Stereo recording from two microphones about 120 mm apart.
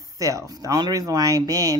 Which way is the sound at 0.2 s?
30° right (ahead or behind).